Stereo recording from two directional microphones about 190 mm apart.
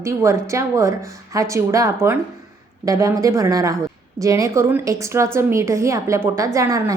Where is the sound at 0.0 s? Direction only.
15° right (ahead or behind).